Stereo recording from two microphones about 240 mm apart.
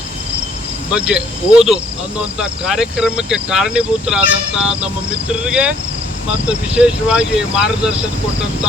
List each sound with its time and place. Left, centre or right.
0.9 s speech: centre